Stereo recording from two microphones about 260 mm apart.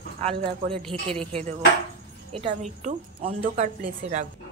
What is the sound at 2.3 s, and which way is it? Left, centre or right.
A woman's voice, right.